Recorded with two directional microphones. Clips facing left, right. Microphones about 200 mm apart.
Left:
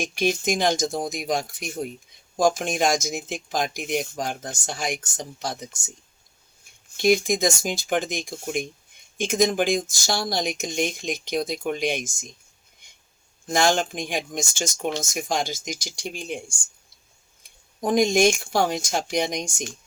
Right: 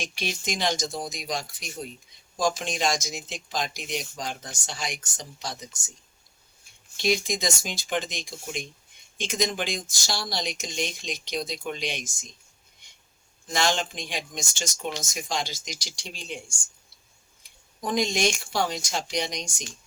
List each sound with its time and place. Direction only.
0.0 s speech: 50° left (ahead or behind)
6.9 s speech: 50° left (ahead or behind)
13.5 s speech: 50° left (ahead or behind)
17.8 s speech: 50° left (ahead or behind)